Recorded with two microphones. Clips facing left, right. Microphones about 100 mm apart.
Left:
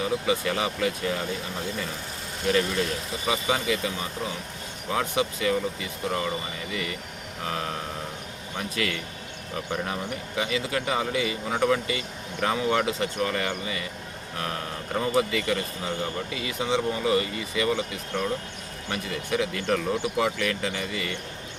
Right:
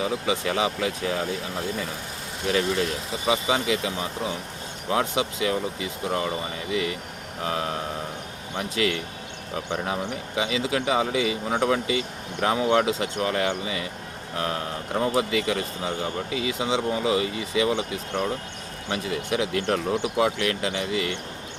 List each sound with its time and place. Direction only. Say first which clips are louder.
0.0 s a man's voice: even; 15° right (ahead or behind)
2.5 s a man's voice: right 1 dB; 15° right (ahead or behind)
8.5 s a man's voice: right 4 dB; 20° right (ahead or behind)